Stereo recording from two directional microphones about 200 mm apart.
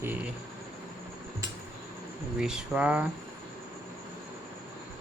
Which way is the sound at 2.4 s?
5° right (ahead or behind).